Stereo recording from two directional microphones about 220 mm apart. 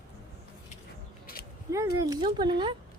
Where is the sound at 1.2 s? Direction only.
45° left (ahead or behind).